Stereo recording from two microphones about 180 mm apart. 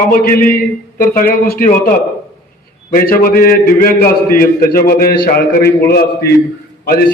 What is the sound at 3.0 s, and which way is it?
A man's voice, 55° left (ahead or behind).